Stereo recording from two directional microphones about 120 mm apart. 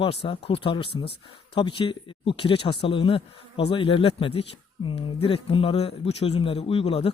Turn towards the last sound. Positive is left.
turn(degrees=50)  # may be behind; listen again after turning